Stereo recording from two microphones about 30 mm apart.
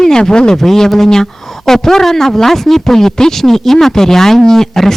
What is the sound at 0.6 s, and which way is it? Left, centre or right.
Speech, centre.